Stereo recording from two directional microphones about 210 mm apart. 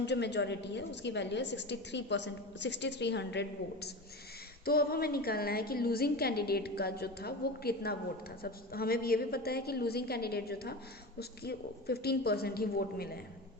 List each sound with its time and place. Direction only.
0.0 s a woman's voice: 55° left (ahead or behind)